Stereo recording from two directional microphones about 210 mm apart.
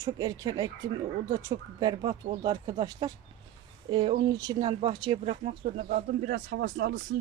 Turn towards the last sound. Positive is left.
turn(degrees=-40)  # may be behind; listen again after turning